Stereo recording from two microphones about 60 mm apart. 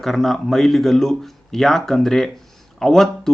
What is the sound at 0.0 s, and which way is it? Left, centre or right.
Speech, centre.